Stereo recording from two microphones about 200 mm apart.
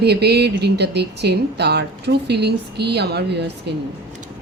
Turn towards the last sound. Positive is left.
turn(degrees=-55)  # may be behind; listen again after turning